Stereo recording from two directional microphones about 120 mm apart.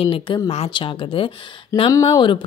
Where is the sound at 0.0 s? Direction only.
50° left (ahead or behind).